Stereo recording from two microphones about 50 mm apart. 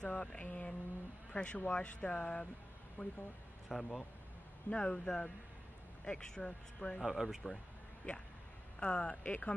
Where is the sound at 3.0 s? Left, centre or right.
Left.